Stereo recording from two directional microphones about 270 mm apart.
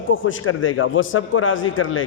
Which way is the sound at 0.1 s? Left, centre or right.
Left.